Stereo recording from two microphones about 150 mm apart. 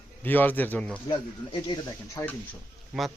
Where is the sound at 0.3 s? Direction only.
10° left (ahead or behind).